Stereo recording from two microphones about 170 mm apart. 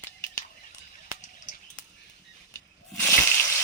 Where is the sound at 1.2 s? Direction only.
50° left (ahead or behind).